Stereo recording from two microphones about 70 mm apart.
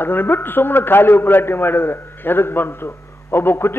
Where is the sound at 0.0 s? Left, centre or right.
Left.